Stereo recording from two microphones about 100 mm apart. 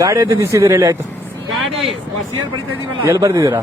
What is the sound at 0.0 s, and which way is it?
Speech, 35° right (ahead or behind).